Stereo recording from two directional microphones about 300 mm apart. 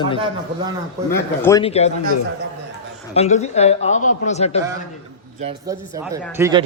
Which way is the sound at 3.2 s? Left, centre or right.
Left.